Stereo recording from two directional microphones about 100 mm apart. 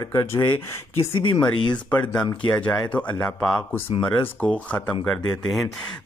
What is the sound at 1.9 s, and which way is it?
A man's voice, 15° left (ahead or behind).